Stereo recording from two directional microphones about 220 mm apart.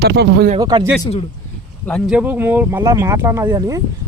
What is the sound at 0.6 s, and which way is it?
Speech, 20° right (ahead or behind).